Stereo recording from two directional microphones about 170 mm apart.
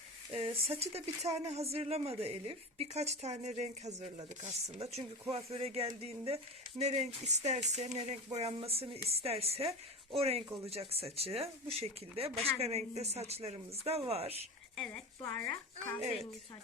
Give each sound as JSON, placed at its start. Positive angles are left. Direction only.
{"t": 0.3, "sound": "a woman's voice", "side_deg": -30}
{"t": 14.8, "sound": "a woman's voice", "side_deg": 5}